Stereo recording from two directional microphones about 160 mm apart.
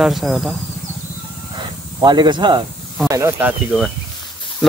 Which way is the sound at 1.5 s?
30° right (ahead or behind).